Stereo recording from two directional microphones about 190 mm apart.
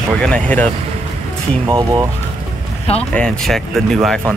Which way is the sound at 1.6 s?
15° right (ahead or behind).